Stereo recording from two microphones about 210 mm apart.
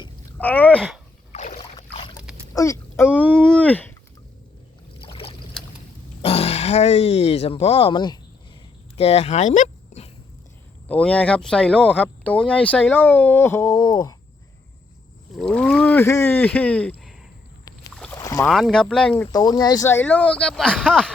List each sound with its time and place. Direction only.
0.3 s speech: 10° left (ahead or behind)
1.3 s boat: 30° left (ahead or behind)
2.1 s a sound: 5° right (ahead or behind)
2.5 s a sound: 15° left (ahead or behind)
4.9 s boat: 25° left (ahead or behind)
6.2 s speech: 30° left (ahead or behind)
10.8 s speech: 5° left (ahead or behind)
15.4 s speech: 5° left (ahead or behind)
17.9 s rowboat: 5° left (ahead or behind)
18.2 s boat: 15° left (ahead or behind)
18.5 s speech: centre (ahead or behind)
19.2 s speech: 20° left (ahead or behind); by 21.1 s centre (ahead or behind)